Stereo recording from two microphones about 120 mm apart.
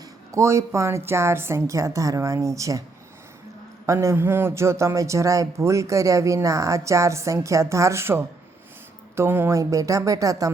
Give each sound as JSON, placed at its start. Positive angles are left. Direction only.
{"t": 0.3, "sound": "a man's voice", "side_deg": -25}
{"t": 3.8, "sound": "a man's voice", "side_deg": -25}